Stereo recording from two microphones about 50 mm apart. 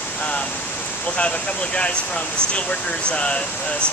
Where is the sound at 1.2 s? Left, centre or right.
Left.